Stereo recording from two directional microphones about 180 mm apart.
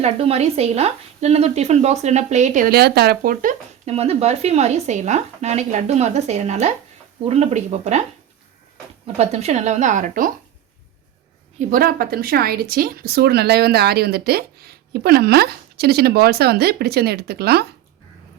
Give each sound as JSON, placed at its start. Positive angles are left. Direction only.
{"t": 0.0, "sound": "speech", "side_deg": -35}
{"t": 3.8, "sound": "speech", "side_deg": -35}
{"t": 9.1, "sound": "speech", "side_deg": -35}
{"t": 11.7, "sound": "speech", "side_deg": -55}